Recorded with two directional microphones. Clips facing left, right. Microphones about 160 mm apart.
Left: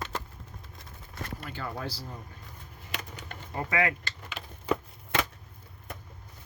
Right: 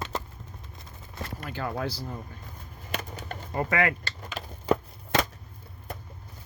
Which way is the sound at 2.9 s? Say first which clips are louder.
Right 5 dB; 40° right (ahead or behind).